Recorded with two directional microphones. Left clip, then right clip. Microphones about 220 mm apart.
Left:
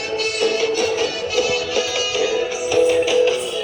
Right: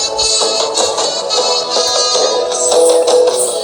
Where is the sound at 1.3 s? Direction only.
20° right (ahead or behind).